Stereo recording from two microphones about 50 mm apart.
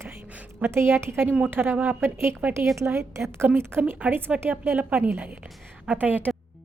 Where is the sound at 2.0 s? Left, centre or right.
Right.